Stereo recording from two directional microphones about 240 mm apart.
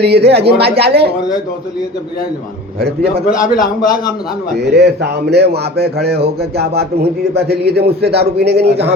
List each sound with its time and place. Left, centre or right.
0.0 s speech: right
3.2 s a man's voice: left
4.5 s a man's voice: right